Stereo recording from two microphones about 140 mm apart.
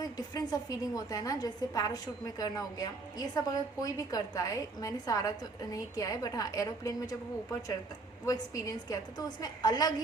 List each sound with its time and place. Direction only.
0.0 s a woman's voice: 25° left (ahead or behind)
8.2 s a woman's voice: 25° left (ahead or behind)